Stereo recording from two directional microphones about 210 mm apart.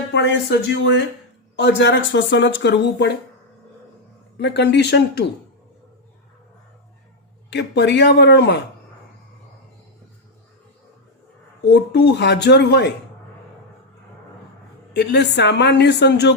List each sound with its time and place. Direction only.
0.1 s speech: 55° left (ahead or behind)
4.4 s speech: 55° left (ahead or behind)
7.5 s speech: 55° left (ahead or behind)
11.6 s speech: 50° left (ahead or behind)
14.9 s speech: 55° left (ahead or behind)